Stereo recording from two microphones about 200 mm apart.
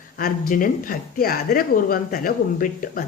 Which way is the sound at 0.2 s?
45° left (ahead or behind).